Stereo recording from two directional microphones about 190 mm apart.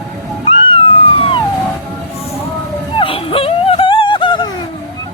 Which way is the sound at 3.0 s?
30° left (ahead or behind).